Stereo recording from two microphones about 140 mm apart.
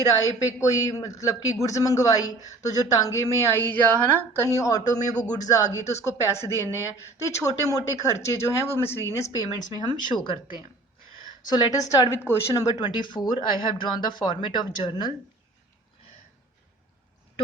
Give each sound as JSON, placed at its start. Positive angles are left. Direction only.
{"t": 0.2, "sound": "a woman's voice", "side_deg": 25}
{"t": 9.7, "sound": "speech", "side_deg": 30}
{"t": 11.4, "sound": "a woman's voice", "side_deg": 30}